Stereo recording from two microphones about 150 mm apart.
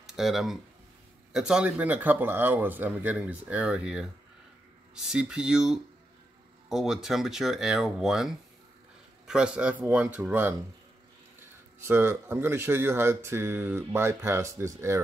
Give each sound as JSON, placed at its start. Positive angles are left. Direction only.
{"t": 0.0, "sound": "speech", "side_deg": 0}
{"t": 11.8, "sound": "speech", "side_deg": -15}